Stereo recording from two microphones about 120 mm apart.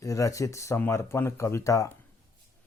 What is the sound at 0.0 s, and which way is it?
Speech, 25° left (ahead or behind).